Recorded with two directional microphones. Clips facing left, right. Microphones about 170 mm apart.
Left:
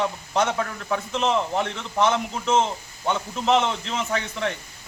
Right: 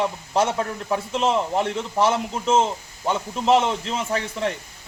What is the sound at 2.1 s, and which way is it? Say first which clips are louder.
A man's voice: right 2 dB; 5° right (ahead or behind).